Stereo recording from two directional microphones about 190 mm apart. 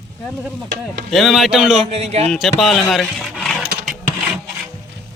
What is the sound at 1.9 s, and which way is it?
Speech, 35° right (ahead or behind).